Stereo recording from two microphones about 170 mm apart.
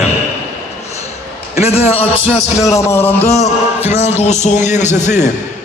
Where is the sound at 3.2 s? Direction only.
40° left (ahead or behind).